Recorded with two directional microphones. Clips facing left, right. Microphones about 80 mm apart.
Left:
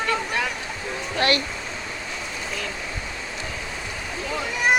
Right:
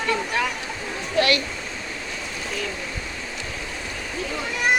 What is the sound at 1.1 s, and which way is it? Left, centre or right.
Speech, left.